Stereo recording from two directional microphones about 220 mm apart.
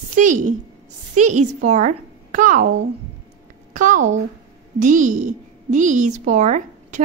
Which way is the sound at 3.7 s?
35° right (ahead or behind).